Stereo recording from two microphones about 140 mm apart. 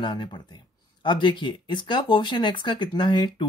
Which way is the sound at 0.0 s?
35° left (ahead or behind).